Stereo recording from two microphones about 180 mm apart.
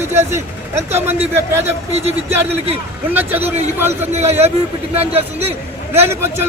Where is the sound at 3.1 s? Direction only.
10° right (ahead or behind).